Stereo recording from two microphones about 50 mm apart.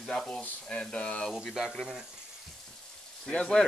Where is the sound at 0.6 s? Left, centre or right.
Centre.